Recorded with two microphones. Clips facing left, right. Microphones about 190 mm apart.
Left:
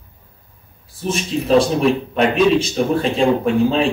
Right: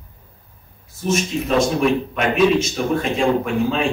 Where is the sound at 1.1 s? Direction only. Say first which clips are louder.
Left 4 dB; 30° left (ahead or behind).